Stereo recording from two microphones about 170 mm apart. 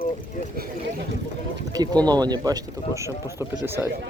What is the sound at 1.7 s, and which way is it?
Speech, 20° right (ahead or behind).